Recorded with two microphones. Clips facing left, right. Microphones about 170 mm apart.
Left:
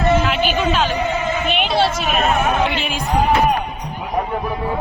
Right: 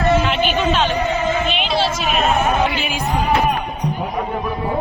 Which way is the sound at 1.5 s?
55° left (ahead or behind).